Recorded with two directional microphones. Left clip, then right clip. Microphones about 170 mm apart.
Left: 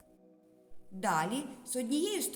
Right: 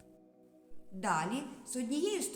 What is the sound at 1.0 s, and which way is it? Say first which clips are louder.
A woman's voice: left 2 dB; 30° left (ahead or behind).